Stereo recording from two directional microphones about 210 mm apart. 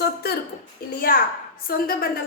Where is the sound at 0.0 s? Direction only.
50° left (ahead or behind).